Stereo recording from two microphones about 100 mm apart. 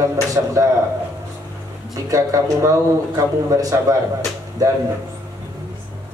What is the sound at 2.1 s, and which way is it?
Speech, 35° right (ahead or behind).